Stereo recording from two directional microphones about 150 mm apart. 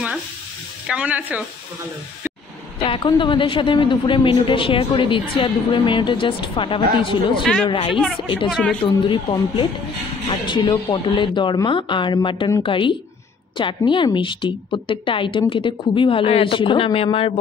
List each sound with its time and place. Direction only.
0.8 s speech: 10° right (ahead or behind)
2.8 s a woman's voice: 35° left (ahead or behind)